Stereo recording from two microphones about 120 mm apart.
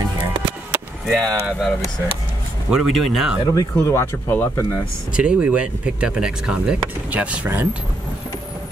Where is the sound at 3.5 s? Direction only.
25° left (ahead or behind).